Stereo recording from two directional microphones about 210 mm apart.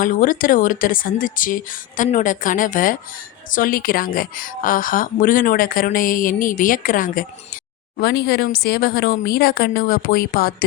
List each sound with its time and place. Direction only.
0.0 s a woman's voice: 40° left (ahead or behind)